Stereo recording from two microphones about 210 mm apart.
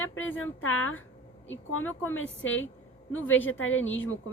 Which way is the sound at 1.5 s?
80° left.